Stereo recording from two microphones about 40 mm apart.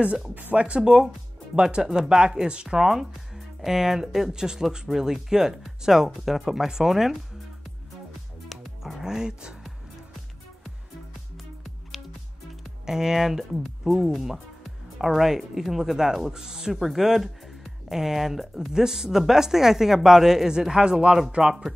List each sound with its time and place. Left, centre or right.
0.3 s speech: right
0.8 s speech: centre
2.9 s music: centre
3.7 s speech: centre
8.5 s music: centre
9.0 s speech: centre
12.8 s speech: centre
18.7 s speech: centre